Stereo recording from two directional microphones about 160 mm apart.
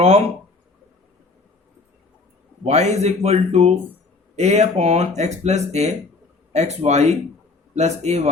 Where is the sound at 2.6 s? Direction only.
45° right (ahead or behind).